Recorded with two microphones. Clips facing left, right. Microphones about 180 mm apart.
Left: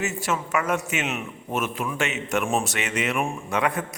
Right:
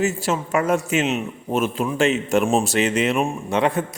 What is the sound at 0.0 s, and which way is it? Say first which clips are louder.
A man's voice: right 5 dB; 30° right (ahead or behind).